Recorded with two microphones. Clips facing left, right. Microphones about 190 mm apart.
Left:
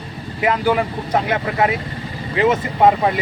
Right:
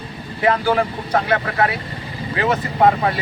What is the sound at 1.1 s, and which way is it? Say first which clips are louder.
Speech: even; 20° left (ahead or behind).